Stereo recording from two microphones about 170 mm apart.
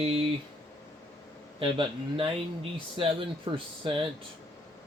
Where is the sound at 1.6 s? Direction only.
30° right (ahead or behind).